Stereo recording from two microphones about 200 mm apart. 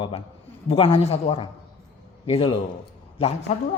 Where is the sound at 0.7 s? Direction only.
30° left (ahead or behind).